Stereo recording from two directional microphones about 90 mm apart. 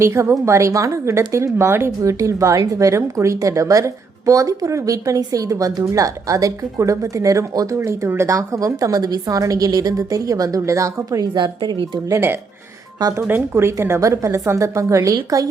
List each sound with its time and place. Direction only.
0.0 s speech: 30° right (ahead or behind)
11.3 s speech: 55° right (ahead or behind)
12.0 s speech: 30° right (ahead or behind)